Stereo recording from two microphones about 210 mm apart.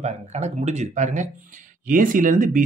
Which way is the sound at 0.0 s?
30° right (ahead or behind).